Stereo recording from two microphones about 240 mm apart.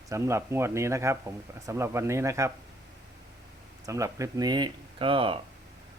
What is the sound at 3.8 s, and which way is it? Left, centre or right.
Speech, centre.